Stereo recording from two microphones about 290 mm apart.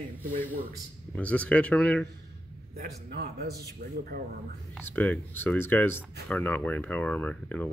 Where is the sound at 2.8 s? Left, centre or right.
Right.